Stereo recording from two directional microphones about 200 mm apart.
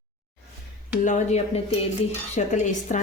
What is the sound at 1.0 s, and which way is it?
Speech, 35° left (ahead or behind).